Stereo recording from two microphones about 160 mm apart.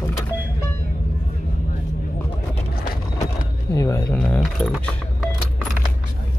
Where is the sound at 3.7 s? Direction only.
20° left (ahead or behind).